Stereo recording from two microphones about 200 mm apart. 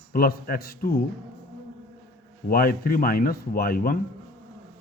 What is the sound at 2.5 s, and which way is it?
Speech, 45° left (ahead or behind).